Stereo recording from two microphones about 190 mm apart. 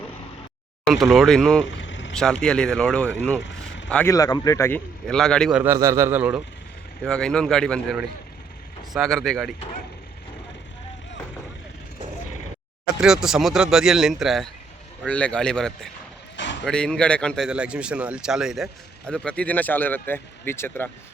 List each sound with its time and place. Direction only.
0.9 s a man's voice: centre (ahead or behind)
1.8 s vehicle: 75° left (ahead or behind)
2.1 s a man's voice: 5° left (ahead or behind)
4.1 s speech: 20° left (ahead or behind)
5.0 s a man's voice: 5° left (ahead or behind)
7.0 s a man's voice: 5° left (ahead or behind)
9.0 s a man's voice: centre (ahead or behind)
13.0 s a man's voice: 5° right (ahead or behind)